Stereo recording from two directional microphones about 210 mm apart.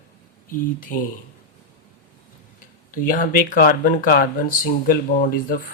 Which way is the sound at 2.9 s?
40° left (ahead or behind).